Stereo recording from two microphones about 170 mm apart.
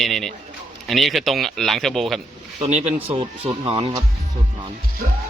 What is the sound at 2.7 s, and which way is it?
Speech, 35° right (ahead or behind).